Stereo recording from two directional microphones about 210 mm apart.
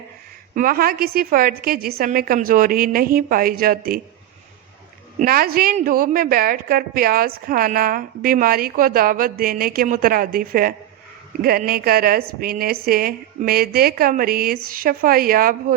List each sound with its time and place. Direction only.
0.5 s a woman's voice: 40° right (ahead or behind)
5.2 s a woman's voice: 45° right (ahead or behind)